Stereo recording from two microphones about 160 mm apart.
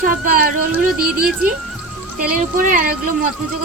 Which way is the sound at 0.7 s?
5° right (ahead or behind).